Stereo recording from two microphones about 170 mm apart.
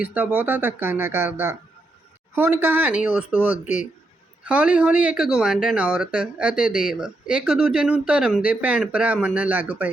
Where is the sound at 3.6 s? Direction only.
45° left (ahead or behind).